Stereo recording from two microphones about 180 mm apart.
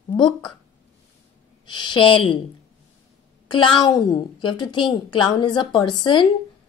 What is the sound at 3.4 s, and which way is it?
A woman's voice, 25° left (ahead or behind).